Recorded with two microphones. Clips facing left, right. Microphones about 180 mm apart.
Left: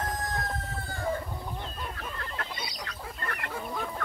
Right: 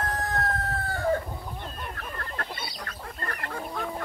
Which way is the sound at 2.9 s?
40° right (ahead or behind).